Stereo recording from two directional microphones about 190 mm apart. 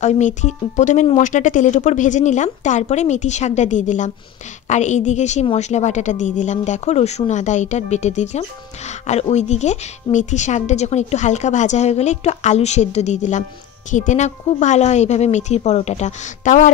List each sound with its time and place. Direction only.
0.0 s a woman's voice: 40° left (ahead or behind)